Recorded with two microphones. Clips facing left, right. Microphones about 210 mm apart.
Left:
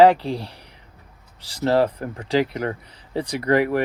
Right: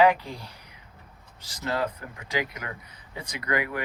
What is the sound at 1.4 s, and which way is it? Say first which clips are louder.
Speech: left 10 dB; 35° left (ahead or behind).